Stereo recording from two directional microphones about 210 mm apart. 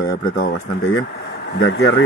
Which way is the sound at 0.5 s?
80° left.